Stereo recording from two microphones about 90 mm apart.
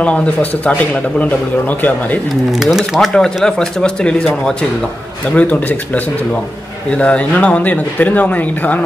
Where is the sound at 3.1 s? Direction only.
10° left (ahead or behind).